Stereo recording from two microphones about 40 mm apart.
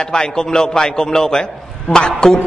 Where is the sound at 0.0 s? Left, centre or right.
Centre.